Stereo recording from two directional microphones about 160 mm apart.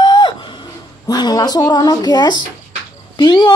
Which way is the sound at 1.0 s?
25° left (ahead or behind).